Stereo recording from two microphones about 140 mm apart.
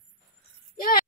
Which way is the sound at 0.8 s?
90° left.